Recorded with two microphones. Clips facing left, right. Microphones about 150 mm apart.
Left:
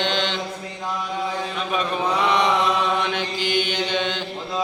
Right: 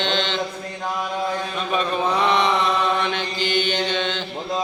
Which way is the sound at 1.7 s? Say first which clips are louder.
Right 2 dB; 5° left (ahead or behind).